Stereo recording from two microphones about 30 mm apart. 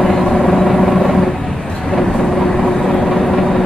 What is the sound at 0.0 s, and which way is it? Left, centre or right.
Vehicle, centre.